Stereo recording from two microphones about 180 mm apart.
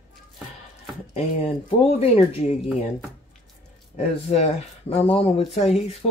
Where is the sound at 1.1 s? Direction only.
35° left (ahead or behind).